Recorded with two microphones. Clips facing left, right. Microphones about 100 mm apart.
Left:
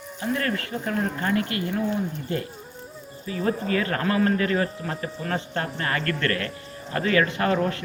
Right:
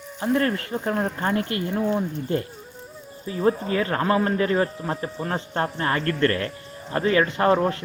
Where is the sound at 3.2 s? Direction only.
25° right (ahead or behind).